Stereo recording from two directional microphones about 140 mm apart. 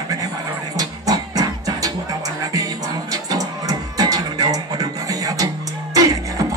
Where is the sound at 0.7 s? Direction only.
25° right (ahead or behind).